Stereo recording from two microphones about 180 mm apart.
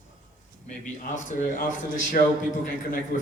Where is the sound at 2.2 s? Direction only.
45° left (ahead or behind).